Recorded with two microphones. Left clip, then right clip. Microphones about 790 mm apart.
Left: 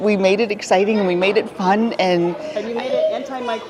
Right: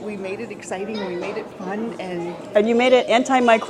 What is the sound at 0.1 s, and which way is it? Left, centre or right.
Speech, left.